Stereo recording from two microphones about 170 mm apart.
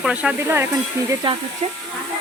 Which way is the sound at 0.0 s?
5° right (ahead or behind).